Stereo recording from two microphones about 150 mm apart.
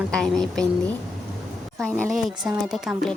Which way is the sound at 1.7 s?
10° left (ahead or behind).